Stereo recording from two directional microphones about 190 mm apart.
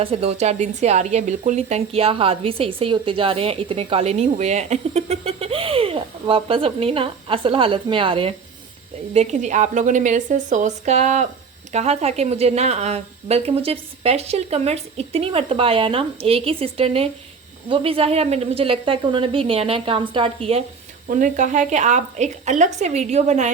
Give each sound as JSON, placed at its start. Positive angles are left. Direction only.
{"t": 0.0, "sound": "speech", "side_deg": -30}
{"t": 9.1, "sound": "a woman's voice", "side_deg": -40}
{"t": 21.1, "sound": "a woman's voice", "side_deg": -40}